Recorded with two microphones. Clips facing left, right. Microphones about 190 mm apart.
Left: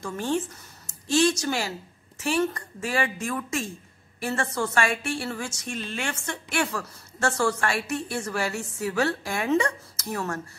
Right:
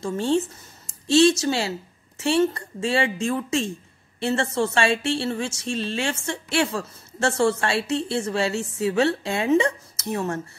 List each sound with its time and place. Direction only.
0.0 s a woman's voice: 25° right (ahead or behind)
1.4 s a woman's voice: 25° right (ahead or behind)